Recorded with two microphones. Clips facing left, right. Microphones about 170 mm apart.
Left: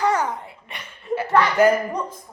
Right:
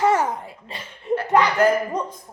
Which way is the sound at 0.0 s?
25° right (ahead or behind).